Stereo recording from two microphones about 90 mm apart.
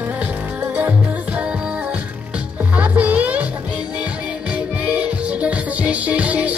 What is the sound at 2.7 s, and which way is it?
Music, 15° right (ahead or behind).